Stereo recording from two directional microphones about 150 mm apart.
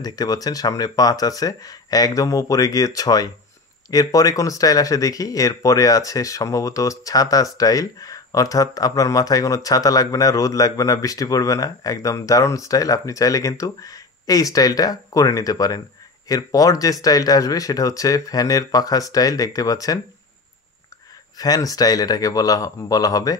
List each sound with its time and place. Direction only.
0.0 s speech: 25° left (ahead or behind)
21.4 s speech: 25° left (ahead or behind)